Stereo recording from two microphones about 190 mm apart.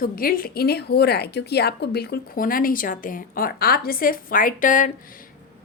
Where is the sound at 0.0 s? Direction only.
50° left (ahead or behind).